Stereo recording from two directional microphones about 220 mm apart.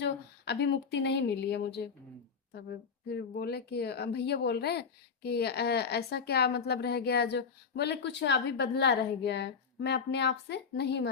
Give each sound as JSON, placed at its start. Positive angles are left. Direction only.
{"t": 0.0, "sound": "speech", "side_deg": 50}
{"t": 3.1, "sound": "speech", "side_deg": 45}